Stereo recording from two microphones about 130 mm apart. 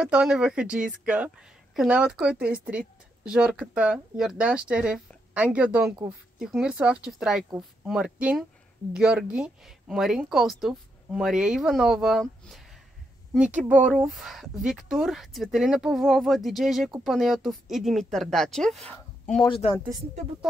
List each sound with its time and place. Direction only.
0.0 s speech: 5° right (ahead or behind)
19.4 s speech: 40° left (ahead or behind)